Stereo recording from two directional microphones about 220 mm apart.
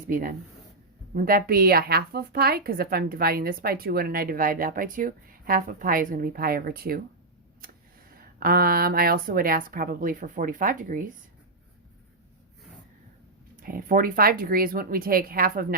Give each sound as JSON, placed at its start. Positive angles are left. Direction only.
{"t": 0.1, "sound": "a woman's voice", "side_deg": -40}
{"t": 8.1, "sound": "a woman's voice", "side_deg": -40}
{"t": 13.6, "sound": "a woman's voice", "side_deg": -40}